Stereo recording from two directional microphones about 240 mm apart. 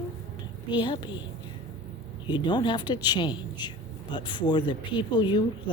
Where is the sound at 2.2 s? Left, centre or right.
Centre.